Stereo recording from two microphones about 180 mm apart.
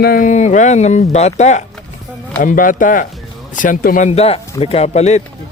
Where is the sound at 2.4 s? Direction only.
50° left (ahead or behind).